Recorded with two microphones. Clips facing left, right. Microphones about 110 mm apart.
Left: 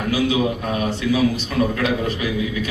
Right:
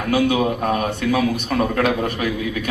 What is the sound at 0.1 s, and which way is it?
A man's voice, 55° right (ahead or behind).